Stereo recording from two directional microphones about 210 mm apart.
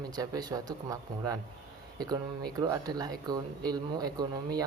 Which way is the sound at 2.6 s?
20° right (ahead or behind).